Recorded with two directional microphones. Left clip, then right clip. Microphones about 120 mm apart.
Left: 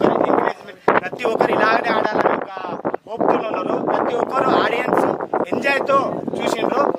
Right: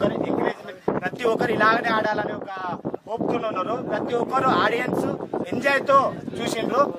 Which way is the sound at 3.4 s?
5° right (ahead or behind).